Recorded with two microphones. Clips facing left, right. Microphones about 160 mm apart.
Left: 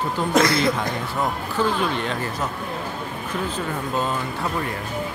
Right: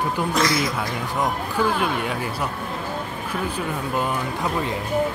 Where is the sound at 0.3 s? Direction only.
55° left (ahead or behind).